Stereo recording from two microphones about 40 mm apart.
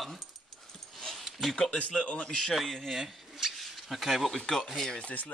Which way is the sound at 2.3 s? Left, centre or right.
Centre.